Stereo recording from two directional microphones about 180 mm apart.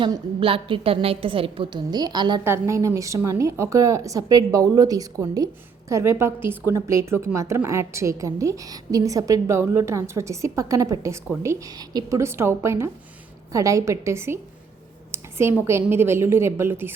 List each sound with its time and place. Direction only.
0.0 s a woman's voice: 30° right (ahead or behind); by 16.9 s 10° right (ahead or behind)